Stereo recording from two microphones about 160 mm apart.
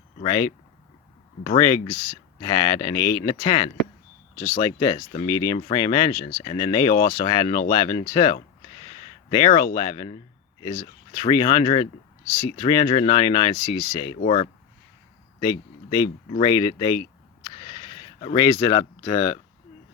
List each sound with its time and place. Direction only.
0.2 s speech: 35° left (ahead or behind)
1.5 s speech: 25° left (ahead or behind)
3.4 s speech: 40° left (ahead or behind)
4.6 s speech: 25° left (ahead or behind)
15.4 s speech: 30° left (ahead or behind)
16.4 s a sound: 30° left (ahead or behind)
18.5 s speech: 25° left (ahead or behind)